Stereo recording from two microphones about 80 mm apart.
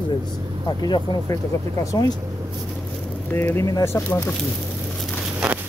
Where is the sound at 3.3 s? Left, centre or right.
Left.